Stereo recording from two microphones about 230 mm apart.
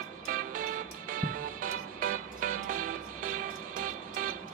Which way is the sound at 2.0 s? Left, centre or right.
Right.